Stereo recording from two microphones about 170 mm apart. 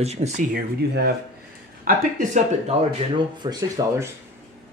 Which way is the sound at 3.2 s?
25° right (ahead or behind).